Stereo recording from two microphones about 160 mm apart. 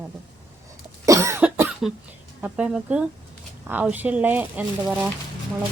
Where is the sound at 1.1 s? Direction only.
20° right (ahead or behind).